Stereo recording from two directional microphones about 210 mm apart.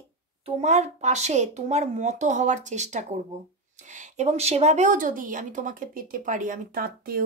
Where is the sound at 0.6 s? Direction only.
35° right (ahead or behind).